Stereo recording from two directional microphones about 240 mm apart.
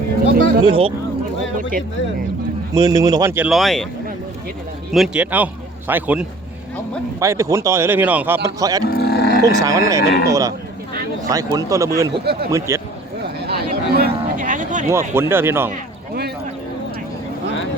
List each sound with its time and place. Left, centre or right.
0.6 s speech: right
2.7 s speech: centre
4.9 s a man's voice: centre
8.9 s livestock: left
9.4 s speech: centre
10.0 s speech: left
10.2 s speech: centre
12.2 s speech: right
12.5 s speech: centre
13.4 s a sound: right
15.1 s speech: centre